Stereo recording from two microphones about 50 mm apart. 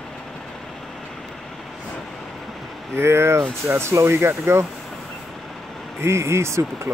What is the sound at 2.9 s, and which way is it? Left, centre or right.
Speech, right.